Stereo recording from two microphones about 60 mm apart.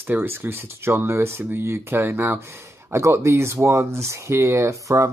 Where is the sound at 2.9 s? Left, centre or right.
Right.